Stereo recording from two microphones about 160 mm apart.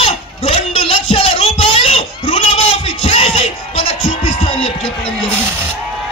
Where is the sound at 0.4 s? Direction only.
35° left (ahead or behind).